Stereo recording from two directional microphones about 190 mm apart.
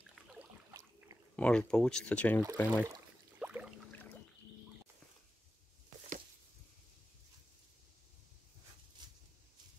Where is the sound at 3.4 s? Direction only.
5° right (ahead or behind).